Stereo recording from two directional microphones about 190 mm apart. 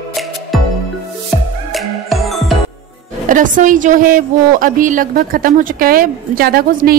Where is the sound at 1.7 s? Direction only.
Centre (ahead or behind).